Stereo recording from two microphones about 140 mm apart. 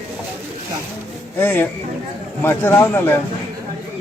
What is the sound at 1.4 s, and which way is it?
Speech, 15° left (ahead or behind).